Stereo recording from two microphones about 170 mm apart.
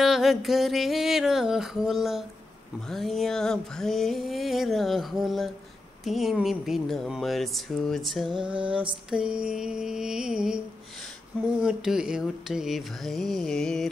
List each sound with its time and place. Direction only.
0.0 s speech: centre (ahead or behind)
11.6 s speech: 5° right (ahead or behind)